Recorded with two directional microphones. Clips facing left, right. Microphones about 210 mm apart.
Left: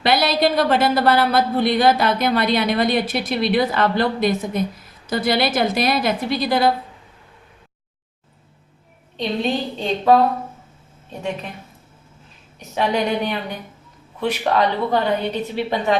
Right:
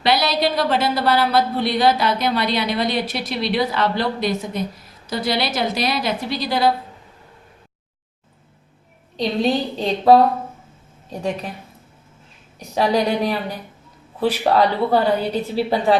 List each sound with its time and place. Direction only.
0.0 s a woman's voice: 50° left (ahead or behind)
9.1 s a woman's voice: 35° right (ahead or behind)
12.5 s a woman's voice: 35° right (ahead or behind)